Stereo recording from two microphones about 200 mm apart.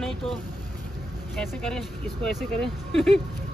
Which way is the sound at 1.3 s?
5° left (ahead or behind).